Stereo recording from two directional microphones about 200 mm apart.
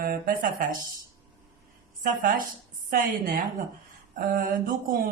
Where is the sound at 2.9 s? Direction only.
45° right (ahead or behind).